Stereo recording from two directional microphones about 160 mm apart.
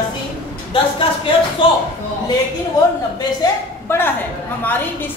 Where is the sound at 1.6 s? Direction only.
35° left (ahead or behind).